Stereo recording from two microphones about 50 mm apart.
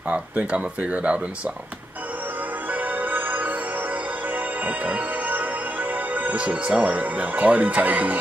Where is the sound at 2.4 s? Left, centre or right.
Right.